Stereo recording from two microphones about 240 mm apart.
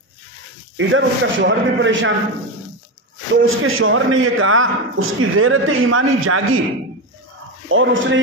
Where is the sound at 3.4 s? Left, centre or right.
Right.